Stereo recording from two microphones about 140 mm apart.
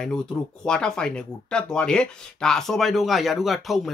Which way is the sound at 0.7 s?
5° left (ahead or behind).